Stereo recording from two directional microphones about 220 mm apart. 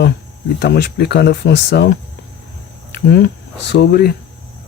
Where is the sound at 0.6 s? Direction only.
50° left (ahead or behind).